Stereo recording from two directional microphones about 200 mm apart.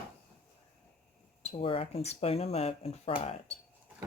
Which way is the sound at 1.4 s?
30° left (ahead or behind).